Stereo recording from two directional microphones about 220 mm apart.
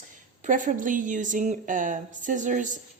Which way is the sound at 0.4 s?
35° right (ahead or behind).